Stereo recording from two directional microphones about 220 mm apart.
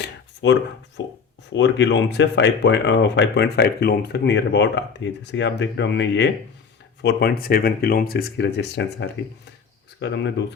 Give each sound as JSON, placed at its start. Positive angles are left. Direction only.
{"t": 0.4, "sound": "speech", "side_deg": 60}